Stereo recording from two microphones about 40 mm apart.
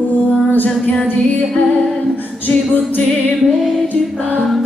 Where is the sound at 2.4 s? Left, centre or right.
Left.